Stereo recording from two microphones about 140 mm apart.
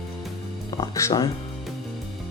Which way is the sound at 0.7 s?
25° left (ahead or behind).